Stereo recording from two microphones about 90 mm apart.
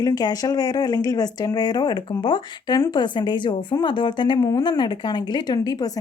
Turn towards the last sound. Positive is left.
turn(degrees=50)  # may be behind; listen again after turning